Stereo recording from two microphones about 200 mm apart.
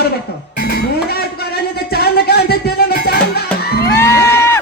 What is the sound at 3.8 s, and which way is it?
Music, 15° left (ahead or behind).